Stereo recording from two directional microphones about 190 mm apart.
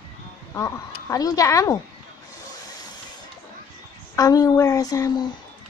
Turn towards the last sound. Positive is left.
turn(degrees=20)  # may be behind; listen again after turning